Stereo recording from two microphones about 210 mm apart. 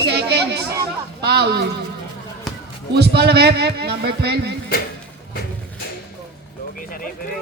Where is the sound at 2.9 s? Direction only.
50° right (ahead or behind).